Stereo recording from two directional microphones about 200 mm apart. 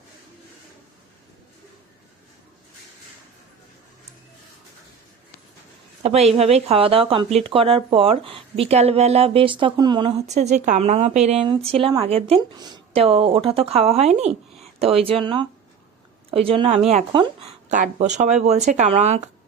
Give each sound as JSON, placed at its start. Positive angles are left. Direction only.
{"t": 6.0, "sound": "a woman's voice", "side_deg": -30}
{"t": 17.7, "sound": "speech", "side_deg": -35}